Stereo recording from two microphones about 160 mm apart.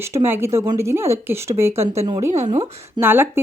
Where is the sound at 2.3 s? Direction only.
45° right (ahead or behind).